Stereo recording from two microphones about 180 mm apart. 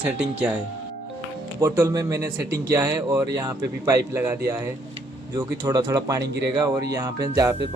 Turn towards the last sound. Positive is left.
turn(degrees=-20)  # may be behind; listen again after turning